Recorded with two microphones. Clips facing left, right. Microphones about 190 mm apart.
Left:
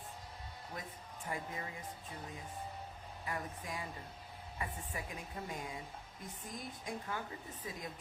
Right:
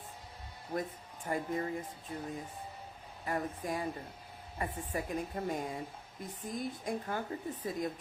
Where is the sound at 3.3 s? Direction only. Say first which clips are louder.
Right 7 dB; 45° right (ahead or behind).